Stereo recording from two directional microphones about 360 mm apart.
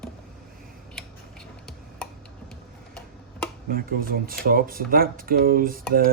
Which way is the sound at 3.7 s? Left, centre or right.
Right.